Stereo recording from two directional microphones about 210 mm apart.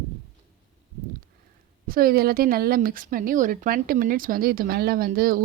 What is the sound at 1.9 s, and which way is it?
Speech, 45° right (ahead or behind).